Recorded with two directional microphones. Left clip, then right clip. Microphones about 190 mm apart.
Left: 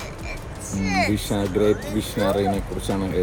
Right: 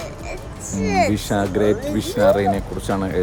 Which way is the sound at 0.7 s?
35° right (ahead or behind).